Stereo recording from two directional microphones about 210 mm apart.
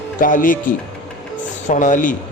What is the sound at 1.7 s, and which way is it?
Speech, 35° left (ahead or behind).